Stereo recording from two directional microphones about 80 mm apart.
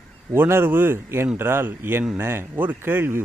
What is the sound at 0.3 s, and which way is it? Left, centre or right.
A man's voice, right.